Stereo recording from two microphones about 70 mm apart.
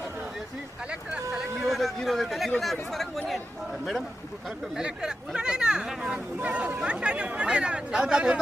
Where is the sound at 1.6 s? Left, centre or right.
Centre.